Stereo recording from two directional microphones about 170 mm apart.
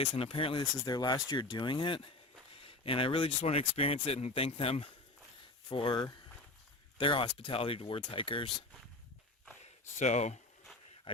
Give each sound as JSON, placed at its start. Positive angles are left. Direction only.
{"t": 0.0, "sound": "speech", "side_deg": 35}
{"t": 5.4, "sound": "a sound", "side_deg": 30}
{"t": 7.0, "sound": "speech", "side_deg": 30}
{"t": 10.0, "sound": "speech", "side_deg": 40}